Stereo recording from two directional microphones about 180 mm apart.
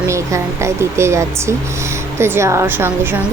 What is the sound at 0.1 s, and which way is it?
A woman's voice, 15° right (ahead or behind).